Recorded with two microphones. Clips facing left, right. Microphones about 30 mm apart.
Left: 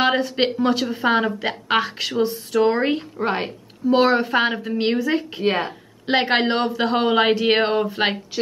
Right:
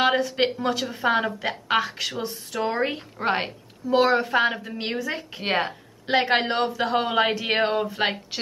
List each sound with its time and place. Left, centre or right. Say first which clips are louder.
0.0 s a woman's voice: left 2 dB; centre
3.2 s a woman's voice: right 3 dB; centre
3.8 s a woman's voice: left 3 dB; left
5.4 s a woman's voice: left 1 dB; centre
6.0 s a woman's voice: left 3 dB; centre